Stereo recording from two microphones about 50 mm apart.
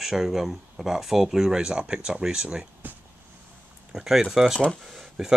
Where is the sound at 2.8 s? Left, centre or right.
Right.